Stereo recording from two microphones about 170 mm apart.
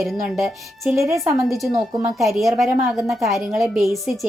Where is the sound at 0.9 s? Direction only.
15° right (ahead or behind).